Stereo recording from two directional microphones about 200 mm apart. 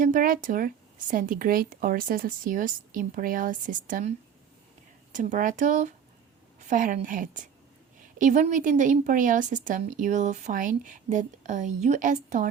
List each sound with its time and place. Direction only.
0.0 s speech: 40° right (ahead or behind)
5.1 s a woman's voice: 40° right (ahead or behind)